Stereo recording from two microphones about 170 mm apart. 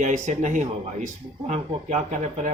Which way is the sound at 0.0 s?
45° right (ahead or behind).